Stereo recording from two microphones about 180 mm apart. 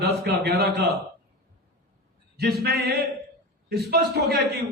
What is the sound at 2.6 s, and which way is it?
A man's voice, 60° right (ahead or behind).